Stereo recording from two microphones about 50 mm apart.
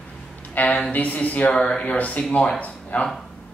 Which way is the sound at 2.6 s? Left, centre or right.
Left.